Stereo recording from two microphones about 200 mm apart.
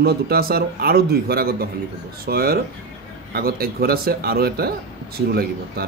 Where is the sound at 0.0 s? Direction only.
50° right (ahead or behind).